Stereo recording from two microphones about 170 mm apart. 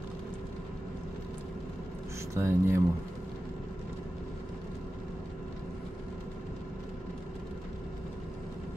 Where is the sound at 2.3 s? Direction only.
15° right (ahead or behind).